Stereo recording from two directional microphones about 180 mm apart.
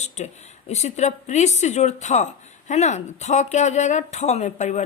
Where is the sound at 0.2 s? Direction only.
40° left (ahead or behind).